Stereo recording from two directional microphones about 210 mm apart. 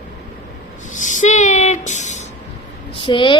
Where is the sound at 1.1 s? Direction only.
35° left (ahead or behind).